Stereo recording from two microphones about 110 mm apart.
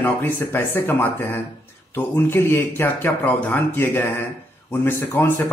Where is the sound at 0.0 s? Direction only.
20° left (ahead or behind).